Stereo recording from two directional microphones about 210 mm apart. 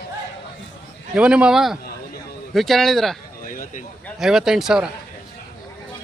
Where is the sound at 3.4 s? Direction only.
40° left (ahead or behind).